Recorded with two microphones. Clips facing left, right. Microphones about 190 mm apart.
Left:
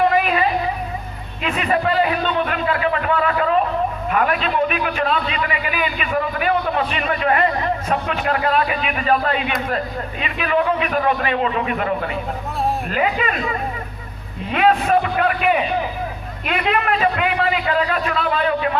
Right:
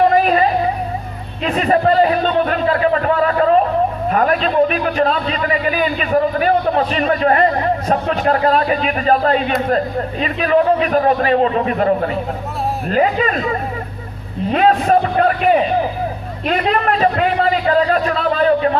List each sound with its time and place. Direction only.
0.0 s music: 35° right (ahead or behind)
1.5 s a man's voice: 35° right (ahead or behind)
14.5 s a man's voice: 35° right (ahead or behind)